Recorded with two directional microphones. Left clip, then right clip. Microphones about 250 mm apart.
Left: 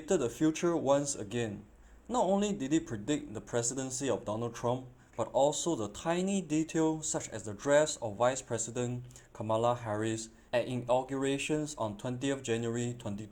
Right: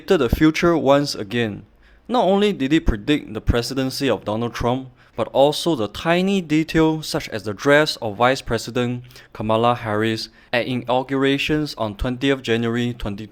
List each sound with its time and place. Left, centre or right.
0.1 s speech: right